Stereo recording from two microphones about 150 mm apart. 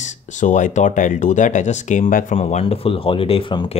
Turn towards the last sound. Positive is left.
turn(degrees=40)  # may be behind; listen again after turning